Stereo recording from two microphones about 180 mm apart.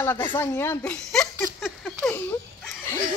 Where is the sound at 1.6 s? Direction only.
5° left (ahead or behind).